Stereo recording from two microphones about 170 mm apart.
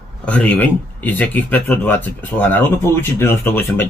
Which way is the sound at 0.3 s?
10° left (ahead or behind).